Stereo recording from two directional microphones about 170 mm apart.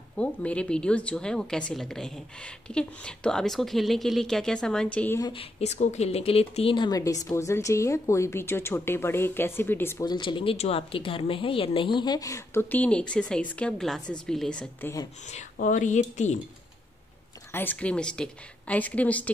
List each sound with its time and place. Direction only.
0.2 s a woman's voice: 5° left (ahead or behind)
5.2 s speech: 35° left (ahead or behind); by 10.0 s 15° left (ahead or behind)
10.0 s a woman's voice: 25° left (ahead or behind); by 14.9 s 5° left (ahead or behind)
15.5 s speech: 50° left (ahead or behind)
17.5 s speech: 10° left (ahead or behind)